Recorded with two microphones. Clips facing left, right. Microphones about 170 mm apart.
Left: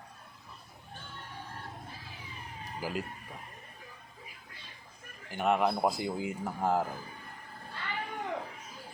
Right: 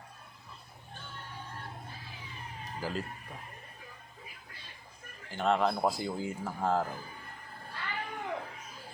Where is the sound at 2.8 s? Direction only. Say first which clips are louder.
Even; 10° left (ahead or behind).